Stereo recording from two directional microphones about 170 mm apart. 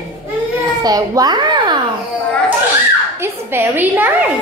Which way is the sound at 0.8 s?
20° right (ahead or behind).